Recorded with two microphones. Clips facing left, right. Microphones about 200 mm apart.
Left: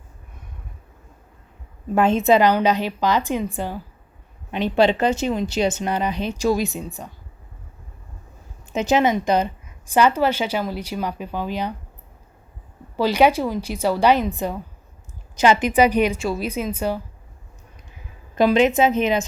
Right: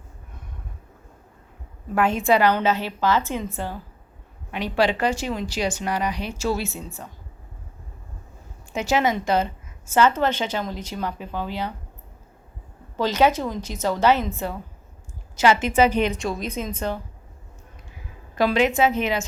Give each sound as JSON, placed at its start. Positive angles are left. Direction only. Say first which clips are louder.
{"t": 2.0, "sound": "a woman's voice", "louder": "left 3 dB", "side_deg": 25}
{"t": 8.7, "sound": "a woman's voice", "louder": "left 3 dB", "side_deg": 20}
{"t": 13.0, "sound": "a woman's voice", "louder": "left 3 dB", "side_deg": 10}
{"t": 18.3, "sound": "speech", "louder": "left 3 dB", "side_deg": 20}